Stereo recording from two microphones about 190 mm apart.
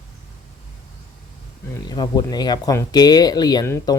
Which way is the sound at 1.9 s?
20° left (ahead or behind).